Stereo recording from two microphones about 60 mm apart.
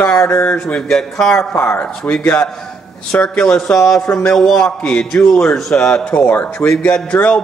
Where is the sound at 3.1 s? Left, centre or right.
Centre.